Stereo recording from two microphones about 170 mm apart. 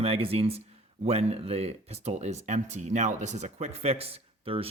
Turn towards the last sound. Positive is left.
turn(degrees=-35)  # may be behind; listen again after turning